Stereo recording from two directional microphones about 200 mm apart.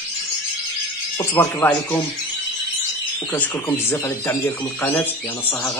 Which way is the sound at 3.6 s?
15° left (ahead or behind).